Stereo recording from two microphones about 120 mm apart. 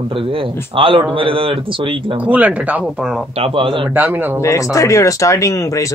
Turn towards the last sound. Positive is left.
turn(degrees=25)  # may be behind; listen again after turning